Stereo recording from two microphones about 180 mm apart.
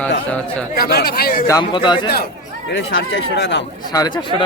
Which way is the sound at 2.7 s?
90° left.